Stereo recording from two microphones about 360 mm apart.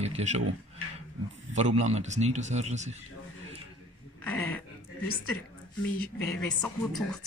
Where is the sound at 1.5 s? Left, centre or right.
Centre.